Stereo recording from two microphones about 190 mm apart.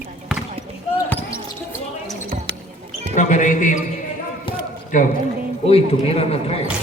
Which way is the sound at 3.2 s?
40° left (ahead or behind).